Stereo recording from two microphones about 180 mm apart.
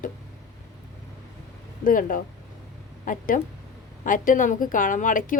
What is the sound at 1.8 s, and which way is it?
A woman's voice, 50° left (ahead or behind).